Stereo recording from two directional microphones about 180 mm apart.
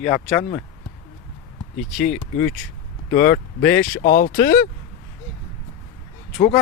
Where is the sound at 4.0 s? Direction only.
55° left (ahead or behind).